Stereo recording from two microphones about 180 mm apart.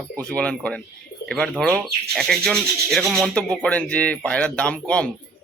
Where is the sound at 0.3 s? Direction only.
5° left (ahead or behind).